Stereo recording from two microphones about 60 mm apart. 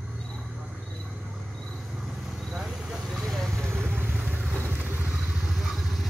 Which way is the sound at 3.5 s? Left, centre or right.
Right.